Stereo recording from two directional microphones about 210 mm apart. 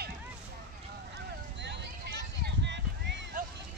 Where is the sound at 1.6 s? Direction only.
50° right (ahead or behind).